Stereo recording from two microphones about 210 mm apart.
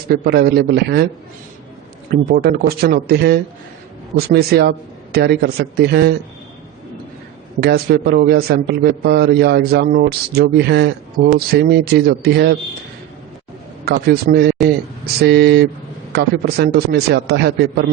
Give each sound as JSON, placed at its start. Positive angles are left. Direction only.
{"t": 0.1, "sound": "a man's voice", "side_deg": -50}
{"t": 2.0, "sound": "a man's voice", "side_deg": -45}
{"t": 7.6, "sound": "a man's voice", "side_deg": -50}
{"t": 13.8, "sound": "a man's voice", "side_deg": -45}